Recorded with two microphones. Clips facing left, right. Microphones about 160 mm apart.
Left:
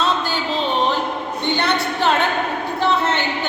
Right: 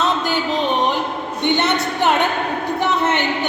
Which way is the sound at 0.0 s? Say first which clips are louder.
Right 2 dB; 15° right (ahead or behind).